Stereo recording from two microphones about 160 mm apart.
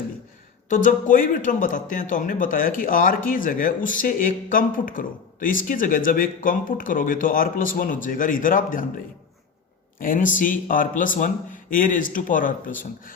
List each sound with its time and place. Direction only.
0.7 s a man's voice: 55° left (ahead or behind)
10.0 s a man's voice: 55° left (ahead or behind)